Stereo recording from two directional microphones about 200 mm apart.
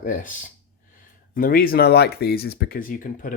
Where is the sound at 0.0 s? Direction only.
40° left (ahead or behind).